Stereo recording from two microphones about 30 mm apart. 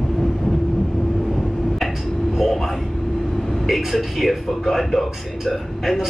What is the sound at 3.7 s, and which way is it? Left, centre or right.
A man's voice, centre.